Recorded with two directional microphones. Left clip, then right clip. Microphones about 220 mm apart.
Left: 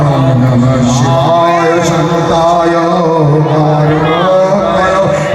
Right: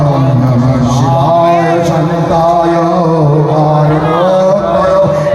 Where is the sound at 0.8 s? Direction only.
5° left (ahead or behind); by 2.6 s 10° right (ahead or behind).